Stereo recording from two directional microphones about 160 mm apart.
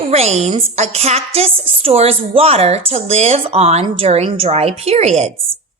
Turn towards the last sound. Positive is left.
turn(degrees=-45)  # may be behind; listen again after turning